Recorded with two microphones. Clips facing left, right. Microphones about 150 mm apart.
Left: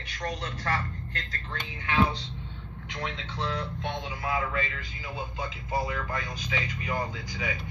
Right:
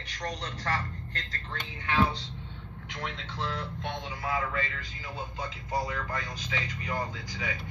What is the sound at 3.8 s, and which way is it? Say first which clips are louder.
Speech: left 2 dB; 15° left (ahead or behind).